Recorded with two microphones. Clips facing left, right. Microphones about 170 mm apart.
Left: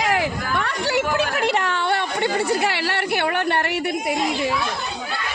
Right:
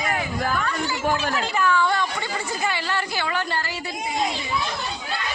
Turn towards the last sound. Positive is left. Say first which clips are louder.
# left 5 dB
turn(degrees=60)  # may be behind; listen again after turning